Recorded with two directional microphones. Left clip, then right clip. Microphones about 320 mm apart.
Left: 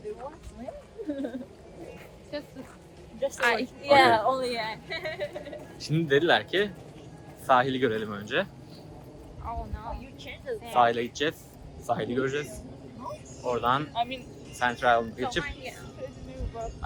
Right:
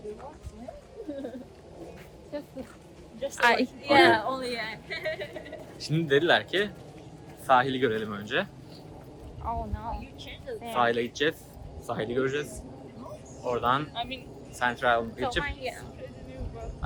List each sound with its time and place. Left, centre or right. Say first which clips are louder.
3.2 s music: left 3 dB; centre
3.4 s speech: right 3 dB; right
3.8 s a man's voice: left 1 dB; centre
9.4 s vehicle: right 3 dB; right
10.2 s a sound: left 4 dB; left
10.8 s a man's voice: left 2 dB; centre
13.9 s speech: left 5 dB; left
14.6 s a man's voice: left 1 dB; centre
15.4 s speech: right 4 dB; right